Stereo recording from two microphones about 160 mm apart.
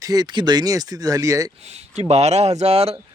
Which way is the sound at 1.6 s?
45° right (ahead or behind).